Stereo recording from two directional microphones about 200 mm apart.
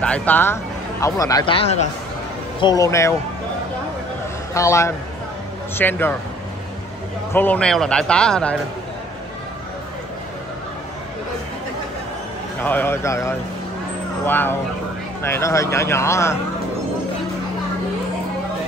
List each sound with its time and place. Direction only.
0.0 s speech: 5° left (ahead or behind); by 1.9 s 30° left (ahead or behind)
2.6 s speech: 20° left (ahead or behind)
4.6 s speech: 15° left (ahead or behind)
7.3 s speech: 5° left (ahead or behind)
12.6 s speech: 10° left (ahead or behind)